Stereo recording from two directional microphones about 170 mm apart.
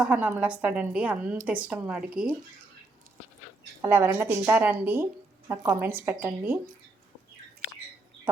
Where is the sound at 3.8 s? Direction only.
15° right (ahead or behind).